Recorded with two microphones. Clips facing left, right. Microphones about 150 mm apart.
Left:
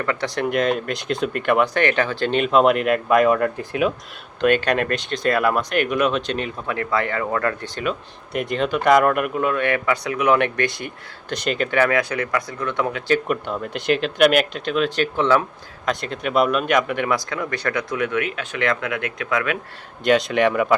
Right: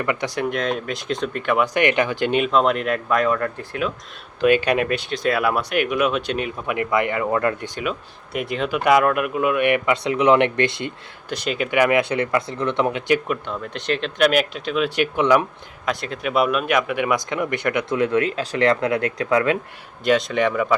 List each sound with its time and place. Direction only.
0.0 s speech: 15° right (ahead or behind)
0.5 s speech: 5° left (ahead or behind)
1.6 s speech: 15° right (ahead or behind)
2.4 s speech: 5° left (ahead or behind)
4.4 s speech: 10° right (ahead or behind)
7.9 s speech: 5° right (ahead or behind); by 10.9 s 25° right (ahead or behind)
11.3 s speech: 5° right (ahead or behind); by 13.1 s 20° right (ahead or behind)
13.2 s speech: 5° left (ahead or behind); by 15.4 s 15° right (ahead or behind)
15.9 s speech: 5° right (ahead or behind)
17.2 s speech: 20° right (ahead or behind)
20.1 s speech: centre (ahead or behind)